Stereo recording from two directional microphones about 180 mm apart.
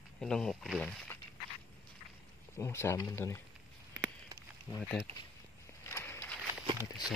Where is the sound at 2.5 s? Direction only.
15° left (ahead or behind).